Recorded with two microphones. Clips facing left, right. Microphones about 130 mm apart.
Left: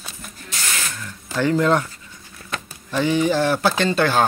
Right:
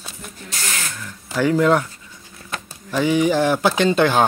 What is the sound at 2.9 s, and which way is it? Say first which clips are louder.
Speech: right 1 dB; 10° right (ahead or behind).